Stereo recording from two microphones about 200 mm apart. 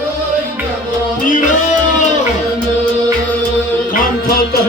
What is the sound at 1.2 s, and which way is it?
Music, 40° left (ahead or behind).